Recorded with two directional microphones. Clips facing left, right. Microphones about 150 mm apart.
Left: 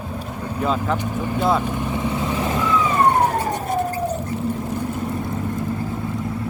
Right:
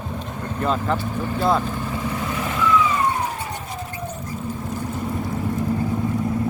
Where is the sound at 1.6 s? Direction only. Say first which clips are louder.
Left 3 dB; 15° left (ahead or behind); by 3.7 s 50° left (ahead or behind).